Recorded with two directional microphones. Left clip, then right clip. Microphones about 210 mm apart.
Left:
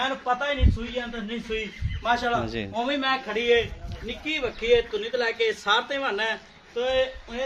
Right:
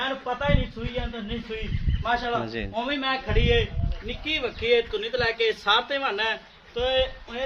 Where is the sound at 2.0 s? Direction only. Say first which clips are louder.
Left 2 dB; 10° left (ahead or behind).